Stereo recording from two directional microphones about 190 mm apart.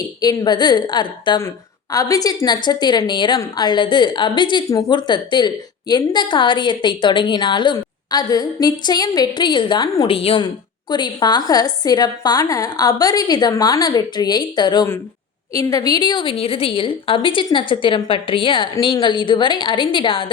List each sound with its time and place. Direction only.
0.2 s a woman's voice: 20° left (ahead or behind)